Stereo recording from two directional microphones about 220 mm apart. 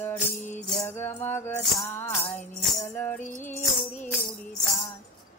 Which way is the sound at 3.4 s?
35° left (ahead or behind).